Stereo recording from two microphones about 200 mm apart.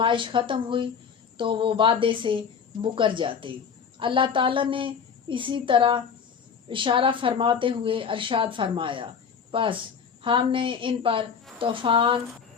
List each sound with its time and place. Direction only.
0.0 s a woman's voice: 25° right (ahead or behind)